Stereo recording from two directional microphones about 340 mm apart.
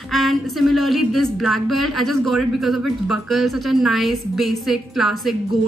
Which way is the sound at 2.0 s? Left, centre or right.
Centre.